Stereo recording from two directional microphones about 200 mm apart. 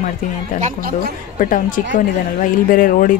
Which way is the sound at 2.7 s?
45° left (ahead or behind).